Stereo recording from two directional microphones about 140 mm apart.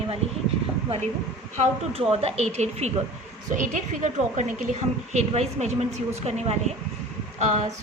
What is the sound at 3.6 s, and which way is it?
Speech, 60° right (ahead or behind).